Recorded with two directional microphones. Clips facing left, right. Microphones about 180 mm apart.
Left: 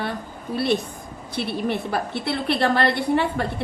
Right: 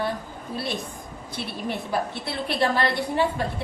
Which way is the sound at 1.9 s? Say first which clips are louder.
Left 3 dB; 65° left (ahead or behind).